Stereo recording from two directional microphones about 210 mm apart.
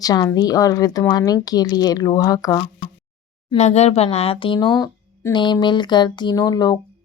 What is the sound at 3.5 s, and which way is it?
Speech, 30° left (ahead or behind).